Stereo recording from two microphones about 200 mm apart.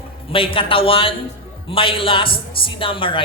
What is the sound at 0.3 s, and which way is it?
A man's voice, 25° left (ahead or behind).